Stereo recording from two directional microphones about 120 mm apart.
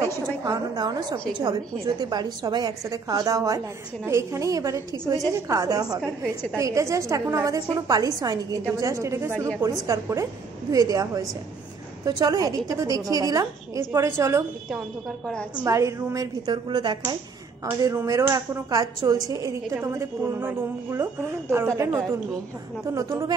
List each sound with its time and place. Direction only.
0.1 s a woman's voice: 30° right (ahead or behind)
15.6 s a woman's voice: 25° right (ahead or behind)
16.6 s speech: 40° right (ahead or behind)
17.6 s a woman's voice: 25° right (ahead or behind)